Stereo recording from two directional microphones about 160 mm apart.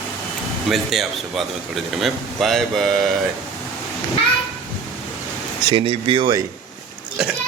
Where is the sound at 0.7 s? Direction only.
Centre (ahead or behind).